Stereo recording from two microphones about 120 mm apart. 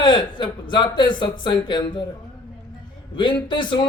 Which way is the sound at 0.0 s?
40° left (ahead or behind).